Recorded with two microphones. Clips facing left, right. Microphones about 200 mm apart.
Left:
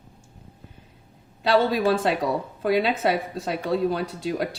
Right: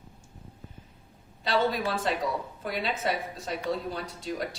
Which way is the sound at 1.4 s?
65° left (ahead or behind).